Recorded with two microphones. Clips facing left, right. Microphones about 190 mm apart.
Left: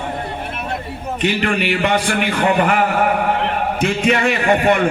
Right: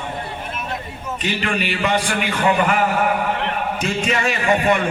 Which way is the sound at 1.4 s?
55° left (ahead or behind).